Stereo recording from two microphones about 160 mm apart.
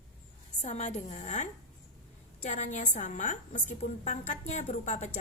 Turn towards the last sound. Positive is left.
turn(degrees=45)  # may be behind; listen again after turning